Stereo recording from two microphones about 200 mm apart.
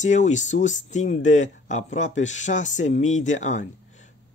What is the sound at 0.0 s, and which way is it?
Speech, 35° left (ahead or behind).